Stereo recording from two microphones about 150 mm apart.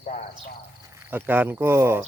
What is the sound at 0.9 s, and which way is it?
Speech, 15° right (ahead or behind).